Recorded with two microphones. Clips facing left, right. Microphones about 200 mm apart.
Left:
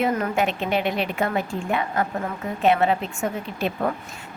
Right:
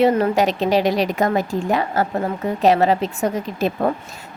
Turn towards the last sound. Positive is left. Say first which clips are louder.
# right 5 dB
turn(degrees=-40)  # may be behind; listen again after turning